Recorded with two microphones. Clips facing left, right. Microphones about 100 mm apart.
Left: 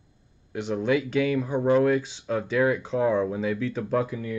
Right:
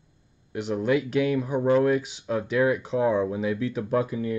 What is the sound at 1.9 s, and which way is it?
Speech, 10° right (ahead or behind).